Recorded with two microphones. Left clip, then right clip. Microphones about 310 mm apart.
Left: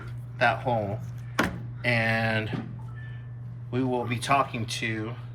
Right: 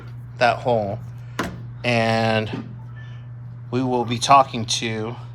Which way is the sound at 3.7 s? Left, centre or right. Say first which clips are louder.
Right 6 dB; centre.